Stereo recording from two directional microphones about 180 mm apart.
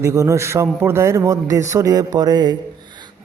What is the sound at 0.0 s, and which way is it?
A man's voice, 15° right (ahead or behind).